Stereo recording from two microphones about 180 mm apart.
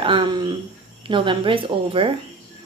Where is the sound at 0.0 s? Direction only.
30° right (ahead or behind).